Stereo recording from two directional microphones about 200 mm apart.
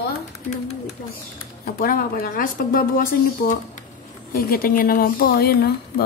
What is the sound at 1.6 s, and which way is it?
Speech, 45° left (ahead or behind).